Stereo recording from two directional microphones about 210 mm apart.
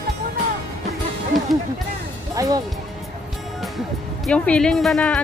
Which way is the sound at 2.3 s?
15° right (ahead or behind).